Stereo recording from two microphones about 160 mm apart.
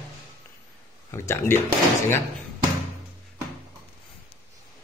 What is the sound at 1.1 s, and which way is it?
Speech, 15° left (ahead or behind).